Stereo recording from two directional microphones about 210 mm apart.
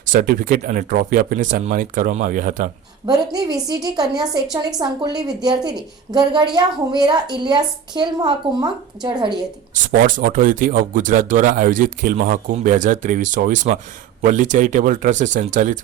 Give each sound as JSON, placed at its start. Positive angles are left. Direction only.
{"t": 0.0, "sound": "speech", "side_deg": -40}
{"t": 3.1, "sound": "a woman's voice", "side_deg": -20}
{"t": 9.9, "sound": "speech", "side_deg": -40}